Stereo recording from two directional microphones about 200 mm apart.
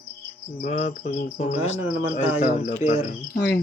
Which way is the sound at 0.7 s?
35° left (ahead or behind).